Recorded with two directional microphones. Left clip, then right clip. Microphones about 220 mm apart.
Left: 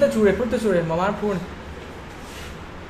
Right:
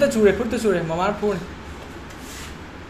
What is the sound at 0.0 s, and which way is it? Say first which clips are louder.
Speech: right 1 dB; 10° left (ahead or behind).